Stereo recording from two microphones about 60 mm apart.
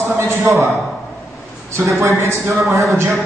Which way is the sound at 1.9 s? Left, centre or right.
Right.